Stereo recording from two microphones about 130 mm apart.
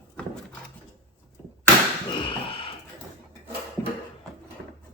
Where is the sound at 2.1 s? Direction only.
40° left (ahead or behind).